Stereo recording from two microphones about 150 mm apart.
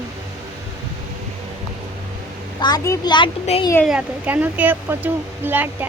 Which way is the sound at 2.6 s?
25° left (ahead or behind).